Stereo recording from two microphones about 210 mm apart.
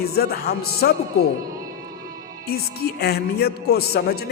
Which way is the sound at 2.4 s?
50° left (ahead or behind).